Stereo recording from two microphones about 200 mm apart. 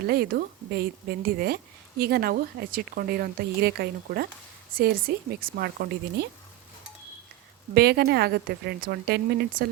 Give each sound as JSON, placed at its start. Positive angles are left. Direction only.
{"t": 0.0, "sound": "a woman's voice", "side_deg": -50}
{"t": 7.7, "sound": "a woman's voice", "side_deg": -55}